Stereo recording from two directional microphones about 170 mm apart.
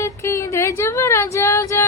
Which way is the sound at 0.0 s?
15° left (ahead or behind).